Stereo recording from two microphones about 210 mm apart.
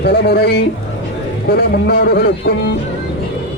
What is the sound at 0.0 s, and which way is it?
A man's voice, 50° left (ahead or behind).